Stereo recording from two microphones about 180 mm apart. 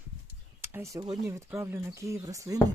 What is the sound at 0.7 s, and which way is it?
Speech, 15° right (ahead or behind).